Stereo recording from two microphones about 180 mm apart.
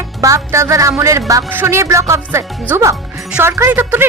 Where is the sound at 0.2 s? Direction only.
15° right (ahead or behind).